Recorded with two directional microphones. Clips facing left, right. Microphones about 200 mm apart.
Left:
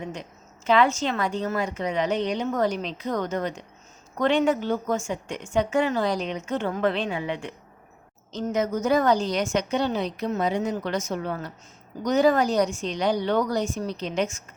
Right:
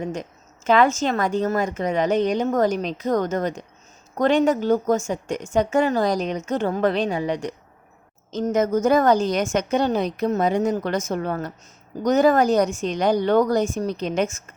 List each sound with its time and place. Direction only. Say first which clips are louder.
0.0 s a woman's voice: right 6 dB; 45° right (ahead or behind)